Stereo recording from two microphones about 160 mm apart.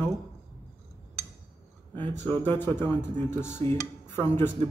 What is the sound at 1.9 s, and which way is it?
Speech, 10° left (ahead or behind).